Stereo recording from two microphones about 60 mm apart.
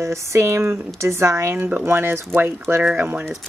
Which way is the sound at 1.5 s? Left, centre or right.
Right.